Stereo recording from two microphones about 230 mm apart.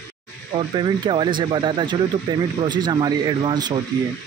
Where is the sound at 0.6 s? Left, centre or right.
Right.